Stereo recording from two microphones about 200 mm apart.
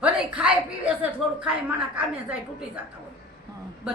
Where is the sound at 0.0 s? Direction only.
5° right (ahead or behind).